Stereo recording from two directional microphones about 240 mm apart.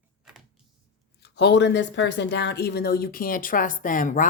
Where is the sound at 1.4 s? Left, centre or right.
Left.